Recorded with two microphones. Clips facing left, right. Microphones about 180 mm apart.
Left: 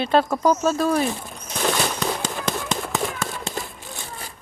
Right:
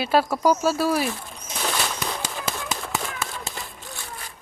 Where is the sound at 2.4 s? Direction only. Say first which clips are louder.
Left 4 dB; centre (ahead or behind).